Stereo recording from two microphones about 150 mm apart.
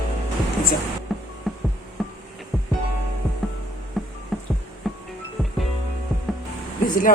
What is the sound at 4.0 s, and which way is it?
Music, centre (ahead or behind).